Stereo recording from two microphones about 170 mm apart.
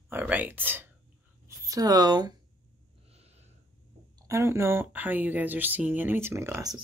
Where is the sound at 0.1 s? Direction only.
10° right (ahead or behind).